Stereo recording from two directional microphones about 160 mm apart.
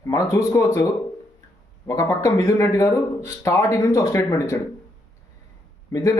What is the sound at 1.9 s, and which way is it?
A man's voice, 20° left (ahead or behind).